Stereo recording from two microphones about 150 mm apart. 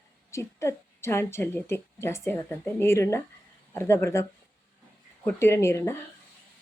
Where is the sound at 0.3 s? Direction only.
20° left (ahead or behind).